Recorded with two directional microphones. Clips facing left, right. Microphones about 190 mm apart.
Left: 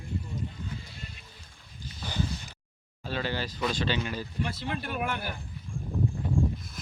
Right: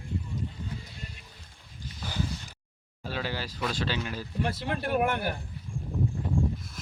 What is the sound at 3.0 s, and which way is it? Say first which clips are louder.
Speech: left 2 dB; 5° right (ahead or behind).